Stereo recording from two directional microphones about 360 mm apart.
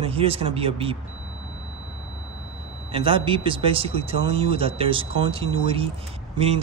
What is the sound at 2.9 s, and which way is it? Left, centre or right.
Speech, centre.